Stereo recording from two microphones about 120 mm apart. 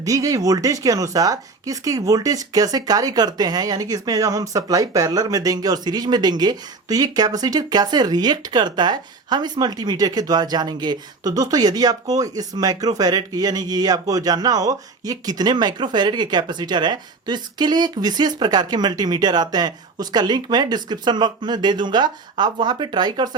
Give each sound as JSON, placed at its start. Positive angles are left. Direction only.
{"t": 0.0, "sound": "speech", "side_deg": -30}